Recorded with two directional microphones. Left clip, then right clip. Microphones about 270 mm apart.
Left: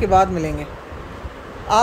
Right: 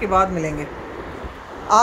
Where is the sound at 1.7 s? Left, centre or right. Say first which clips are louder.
Even; centre.